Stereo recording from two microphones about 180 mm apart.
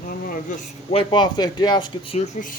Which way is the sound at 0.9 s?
25° left (ahead or behind).